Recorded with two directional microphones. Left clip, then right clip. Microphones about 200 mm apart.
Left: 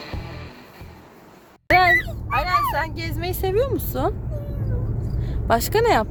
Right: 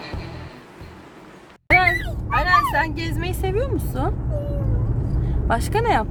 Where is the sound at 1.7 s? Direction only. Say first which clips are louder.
Left 1 dB; 35° left (ahead or behind).